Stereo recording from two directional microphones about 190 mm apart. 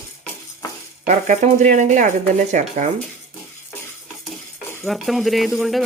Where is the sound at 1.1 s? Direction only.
40° right (ahead or behind).